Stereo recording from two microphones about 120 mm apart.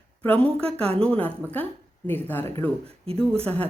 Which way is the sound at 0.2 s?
10° left (ahead or behind).